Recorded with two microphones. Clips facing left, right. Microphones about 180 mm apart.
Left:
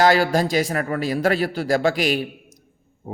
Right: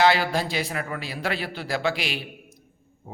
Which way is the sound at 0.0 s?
45° left (ahead or behind).